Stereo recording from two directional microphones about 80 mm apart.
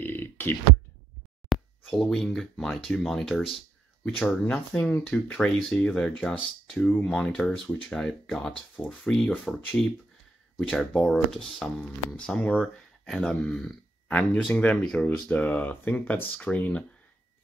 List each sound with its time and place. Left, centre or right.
0.0 s burping: left
1.5 s speech: centre
5.9 s speech: centre
6.2 s speech: centre